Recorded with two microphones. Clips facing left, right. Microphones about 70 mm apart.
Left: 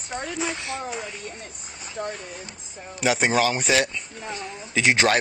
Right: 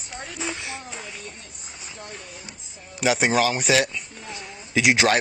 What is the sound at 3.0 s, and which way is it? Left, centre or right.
Speech, centre.